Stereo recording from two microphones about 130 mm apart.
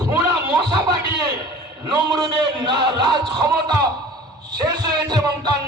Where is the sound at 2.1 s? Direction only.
35° right (ahead or behind).